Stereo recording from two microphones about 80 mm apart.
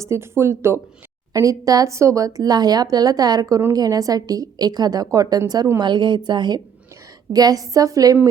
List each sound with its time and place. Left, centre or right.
0.0 s speech: right
1.3 s speech: right
5.8 s a woman's voice: right
7.3 s speech: right